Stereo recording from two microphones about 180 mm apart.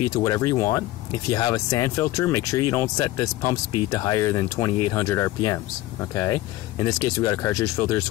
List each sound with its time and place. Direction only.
0.0 s speech: 20° left (ahead or behind)